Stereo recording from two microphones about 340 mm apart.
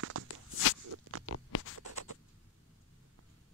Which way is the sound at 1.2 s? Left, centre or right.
Left.